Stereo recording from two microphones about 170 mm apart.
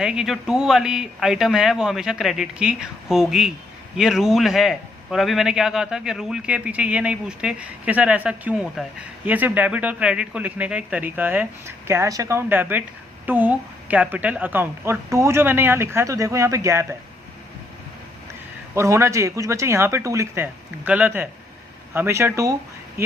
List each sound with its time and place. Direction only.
0.0 s a man's voice: 5° right (ahead or behind)
18.7 s a man's voice: 15° right (ahead or behind)